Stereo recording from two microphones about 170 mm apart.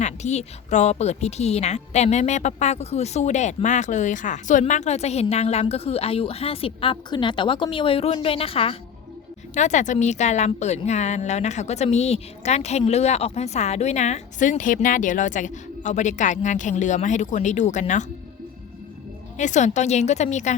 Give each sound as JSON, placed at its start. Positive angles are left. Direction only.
{"t": 0.0, "sound": "a woman's voice", "side_deg": 40}
{"t": 9.6, "sound": "a woman's voice", "side_deg": 45}
{"t": 19.4, "sound": "a woman's voice", "side_deg": 45}